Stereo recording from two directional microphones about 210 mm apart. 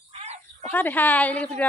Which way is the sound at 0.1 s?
30° right (ahead or behind).